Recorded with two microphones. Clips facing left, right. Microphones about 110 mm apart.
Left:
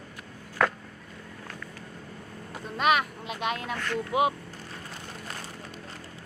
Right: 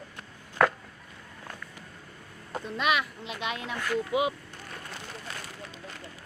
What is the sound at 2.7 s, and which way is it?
Speech, 45° left (ahead or behind).